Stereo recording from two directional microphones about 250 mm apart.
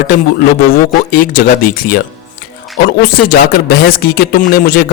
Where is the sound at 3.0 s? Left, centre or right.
Left.